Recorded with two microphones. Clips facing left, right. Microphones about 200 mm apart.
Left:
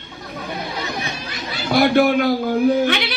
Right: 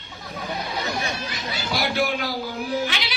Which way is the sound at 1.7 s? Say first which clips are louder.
Left 10 dB; 55° left (ahead or behind).